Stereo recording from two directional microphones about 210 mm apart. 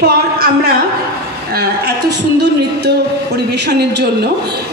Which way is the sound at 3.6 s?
50° right (ahead or behind).